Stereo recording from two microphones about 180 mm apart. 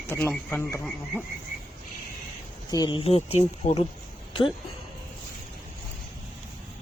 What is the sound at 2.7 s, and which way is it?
Speech, 25° left (ahead or behind).